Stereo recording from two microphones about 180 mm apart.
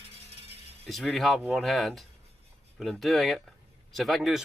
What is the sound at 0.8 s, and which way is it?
Speech, centre (ahead or behind).